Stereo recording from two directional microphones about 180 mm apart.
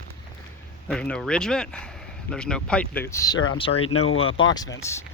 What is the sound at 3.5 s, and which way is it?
Speech, 30° left (ahead or behind).